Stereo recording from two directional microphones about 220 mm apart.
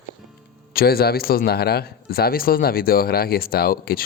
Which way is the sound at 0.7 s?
45° left (ahead or behind).